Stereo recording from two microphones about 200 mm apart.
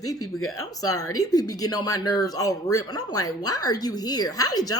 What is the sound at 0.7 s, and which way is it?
A woman's voice, 15° left (ahead or behind).